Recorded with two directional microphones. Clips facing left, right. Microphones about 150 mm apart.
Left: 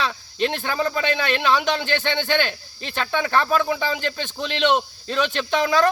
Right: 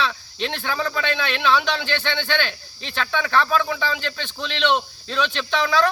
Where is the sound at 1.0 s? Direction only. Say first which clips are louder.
Left 1 dB; 45° left (ahead or behind).